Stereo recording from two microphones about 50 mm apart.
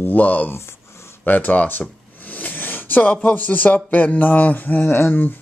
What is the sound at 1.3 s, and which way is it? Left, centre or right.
Speech, left.